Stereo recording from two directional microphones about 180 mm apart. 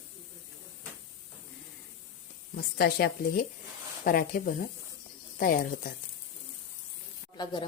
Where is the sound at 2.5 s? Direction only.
60° left (ahead or behind).